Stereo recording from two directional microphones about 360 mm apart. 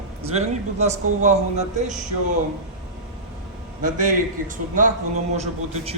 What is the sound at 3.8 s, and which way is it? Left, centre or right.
Speech, right.